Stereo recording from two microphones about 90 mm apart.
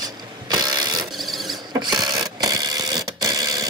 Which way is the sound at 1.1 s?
Centre (ahead or behind).